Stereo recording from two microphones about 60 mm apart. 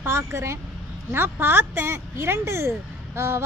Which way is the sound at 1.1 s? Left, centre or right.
Right.